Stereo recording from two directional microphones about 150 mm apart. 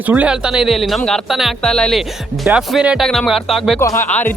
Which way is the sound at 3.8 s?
20° left (ahead or behind).